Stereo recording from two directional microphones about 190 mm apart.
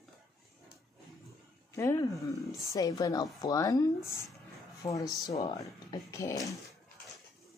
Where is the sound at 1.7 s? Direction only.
15° left (ahead or behind).